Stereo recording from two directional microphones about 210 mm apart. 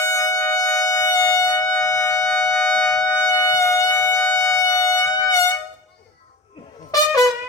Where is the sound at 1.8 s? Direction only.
15° left (ahead or behind).